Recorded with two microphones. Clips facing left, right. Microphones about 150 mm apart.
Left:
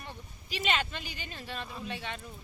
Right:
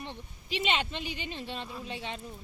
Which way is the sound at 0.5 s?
25° right (ahead or behind).